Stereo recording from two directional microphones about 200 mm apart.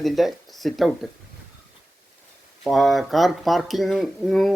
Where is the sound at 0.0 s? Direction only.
Centre (ahead or behind).